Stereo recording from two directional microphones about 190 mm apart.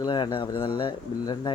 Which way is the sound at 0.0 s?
25° left (ahead or behind).